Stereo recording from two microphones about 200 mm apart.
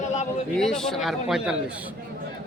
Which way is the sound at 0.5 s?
Centre (ahead or behind).